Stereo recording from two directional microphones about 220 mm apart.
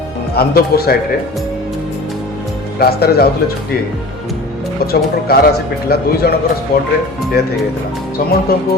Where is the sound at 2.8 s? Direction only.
45° left (ahead or behind).